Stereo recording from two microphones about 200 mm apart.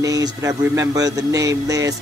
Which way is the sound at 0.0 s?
15° right (ahead or behind).